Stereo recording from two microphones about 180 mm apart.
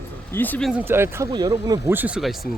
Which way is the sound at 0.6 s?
10° right (ahead or behind).